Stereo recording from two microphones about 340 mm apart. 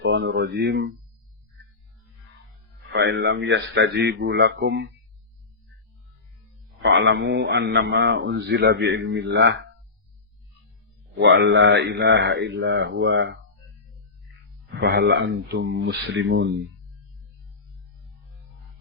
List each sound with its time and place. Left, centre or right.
0.0 s a man's voice: right
2.9 s a man's voice: right
6.8 s a man's voice: right
11.2 s a man's voice: right
14.8 s a man's voice: right